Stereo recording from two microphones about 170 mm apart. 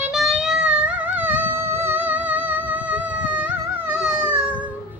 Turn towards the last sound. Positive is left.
turn(degrees=-5)  # may be behind; listen again after turning